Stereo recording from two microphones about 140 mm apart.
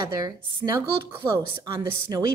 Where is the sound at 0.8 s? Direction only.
15° right (ahead or behind).